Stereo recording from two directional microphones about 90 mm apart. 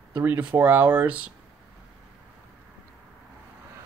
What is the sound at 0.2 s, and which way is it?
Speech, 20° right (ahead or behind).